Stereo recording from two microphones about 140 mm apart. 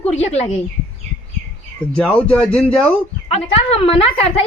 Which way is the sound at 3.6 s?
45° left (ahead or behind).